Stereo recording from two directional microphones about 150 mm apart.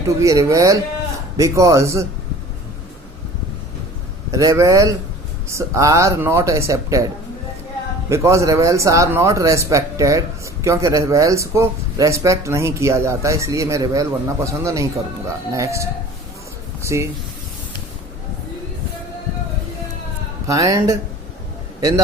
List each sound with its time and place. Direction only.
0.2 s speech: 20° right (ahead or behind)
4.3 s speech: 20° right (ahead or behind)
8.1 s speech: 20° right (ahead or behind)
20.5 s a man's voice: 20° right (ahead or behind)